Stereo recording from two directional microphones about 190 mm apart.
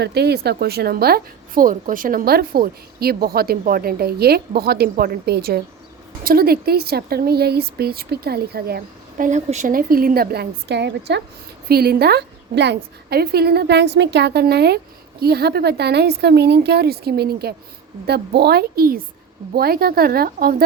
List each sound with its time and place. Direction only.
0.0 s a woman's voice: 60° right (ahead or behind)